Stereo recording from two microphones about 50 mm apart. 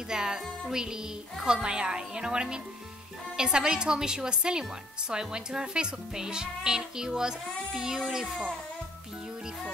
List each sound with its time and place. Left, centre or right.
0.1 s a woman's voice: centre